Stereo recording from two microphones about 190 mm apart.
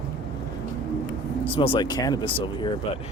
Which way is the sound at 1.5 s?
30° left (ahead or behind).